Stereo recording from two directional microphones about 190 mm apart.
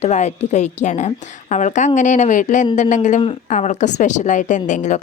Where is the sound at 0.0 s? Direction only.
35° left (ahead or behind).